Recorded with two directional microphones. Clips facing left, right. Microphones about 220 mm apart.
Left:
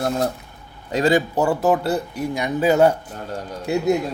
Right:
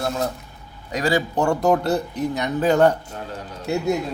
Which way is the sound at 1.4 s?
5° left (ahead or behind).